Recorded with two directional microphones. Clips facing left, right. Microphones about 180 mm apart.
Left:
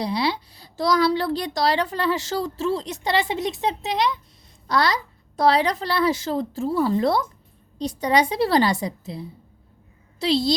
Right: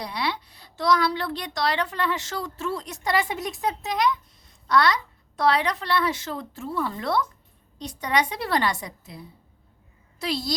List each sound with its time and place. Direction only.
0.0 s a woman's voice: 30° left (ahead or behind)